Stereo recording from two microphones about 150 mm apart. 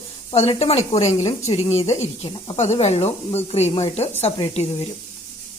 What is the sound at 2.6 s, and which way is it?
Speech, 45° left (ahead or behind).